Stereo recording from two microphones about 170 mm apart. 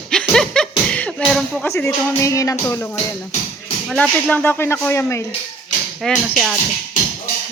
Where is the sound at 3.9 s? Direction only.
5° left (ahead or behind).